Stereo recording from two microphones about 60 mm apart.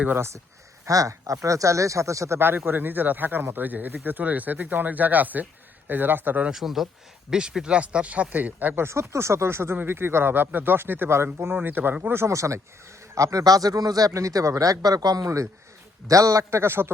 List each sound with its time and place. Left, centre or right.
0.2 s speech: right
0.9 s speech: right
2.6 s speech: right
6.5 s speech: centre; by 8.8 s right
8.8 s speech: right
13.1 s speech: right
14.6 s speech: right
16.5 s speech: right